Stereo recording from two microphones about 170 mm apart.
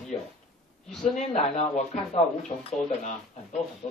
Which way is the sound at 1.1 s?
45° left (ahead or behind).